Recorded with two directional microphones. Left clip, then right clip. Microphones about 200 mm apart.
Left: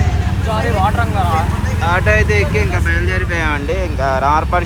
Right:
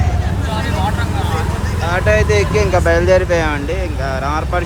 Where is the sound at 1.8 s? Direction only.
10° right (ahead or behind).